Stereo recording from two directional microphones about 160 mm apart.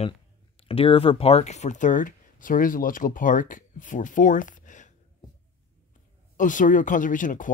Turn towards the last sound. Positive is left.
turn(degrees=55)  # may be behind; listen again after turning